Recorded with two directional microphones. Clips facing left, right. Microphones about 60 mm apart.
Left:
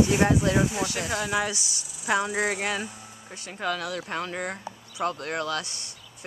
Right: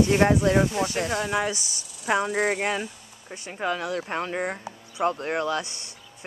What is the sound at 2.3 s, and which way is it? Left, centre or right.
Speech, centre.